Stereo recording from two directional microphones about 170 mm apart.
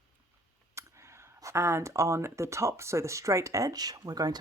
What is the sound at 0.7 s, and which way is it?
Speech, 15° right (ahead or behind).